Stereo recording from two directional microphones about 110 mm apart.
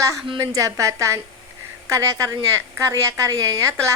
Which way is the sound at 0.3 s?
30° right (ahead or behind).